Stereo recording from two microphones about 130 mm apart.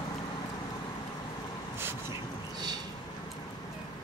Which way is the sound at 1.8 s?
15° right (ahead or behind).